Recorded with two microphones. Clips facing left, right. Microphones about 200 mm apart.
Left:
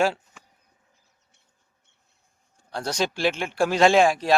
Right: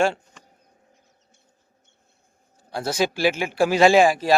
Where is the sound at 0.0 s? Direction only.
5° left (ahead or behind).